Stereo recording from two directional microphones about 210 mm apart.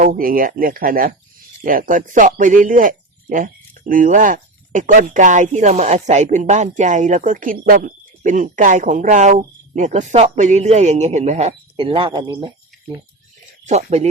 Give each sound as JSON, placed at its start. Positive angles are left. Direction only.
{"t": 0.0, "sound": "a man's voice", "side_deg": -40}